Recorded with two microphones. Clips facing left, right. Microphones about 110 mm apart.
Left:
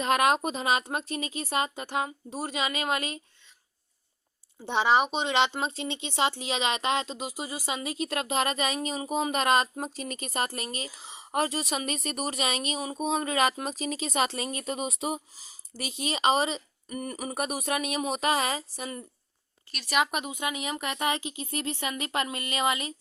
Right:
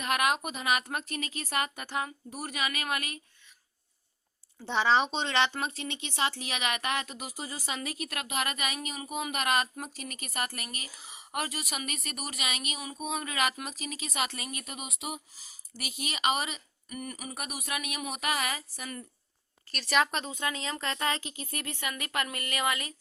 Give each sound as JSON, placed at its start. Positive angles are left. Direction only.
{"t": 0.0, "sound": "a woman's voice", "side_deg": 30}
{"t": 4.6, "sound": "speech", "side_deg": 15}
{"t": 19.7, "sound": "a woman's voice", "side_deg": 10}